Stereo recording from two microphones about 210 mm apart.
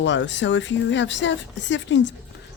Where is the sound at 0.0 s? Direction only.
60° left (ahead or behind).